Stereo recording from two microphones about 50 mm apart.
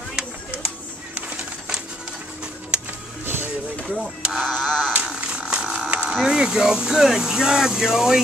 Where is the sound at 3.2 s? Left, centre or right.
Right.